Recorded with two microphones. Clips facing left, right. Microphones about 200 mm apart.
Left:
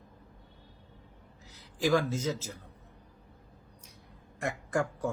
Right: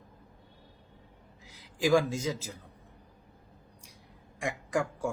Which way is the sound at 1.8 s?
10° right (ahead or behind).